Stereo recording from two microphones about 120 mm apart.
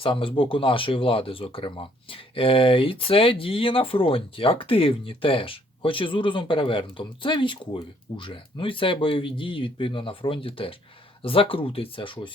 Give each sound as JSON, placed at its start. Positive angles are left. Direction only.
{"t": 0.0, "sound": "speech", "side_deg": 50}